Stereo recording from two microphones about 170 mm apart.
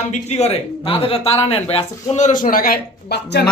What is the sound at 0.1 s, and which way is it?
A man's voice, 40° left (ahead or behind).